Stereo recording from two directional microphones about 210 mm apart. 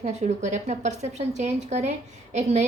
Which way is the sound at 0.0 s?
30° right (ahead or behind).